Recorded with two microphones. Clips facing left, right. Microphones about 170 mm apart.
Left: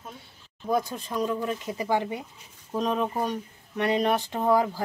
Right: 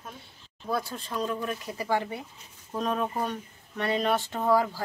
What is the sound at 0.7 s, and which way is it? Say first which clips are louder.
Speech: left 4 dB; 15° left (ahead or behind).